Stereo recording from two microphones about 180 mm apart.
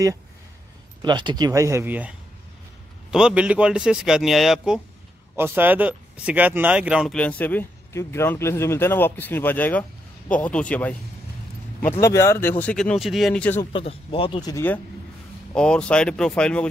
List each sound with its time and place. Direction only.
1.0 s speech: 25° right (ahead or behind); by 7.2 s 5° right (ahead or behind)
7.2 s speech: 10° left (ahead or behind)
12.0 s speech: 15° left (ahead or behind)
13.7 s speech: 30° left (ahead or behind); by 16.6 s 5° left (ahead or behind)